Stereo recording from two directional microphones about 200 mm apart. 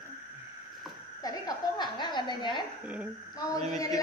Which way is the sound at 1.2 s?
20° left (ahead or behind).